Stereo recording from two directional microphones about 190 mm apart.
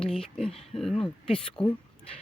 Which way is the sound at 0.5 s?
30° left (ahead or behind).